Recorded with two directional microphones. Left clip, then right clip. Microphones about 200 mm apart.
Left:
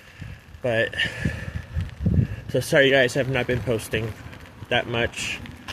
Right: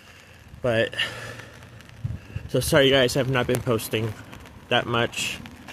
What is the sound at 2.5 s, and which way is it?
Speech, 30° right (ahead or behind).